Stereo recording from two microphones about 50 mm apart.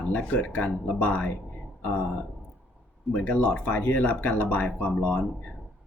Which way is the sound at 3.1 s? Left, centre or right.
Left.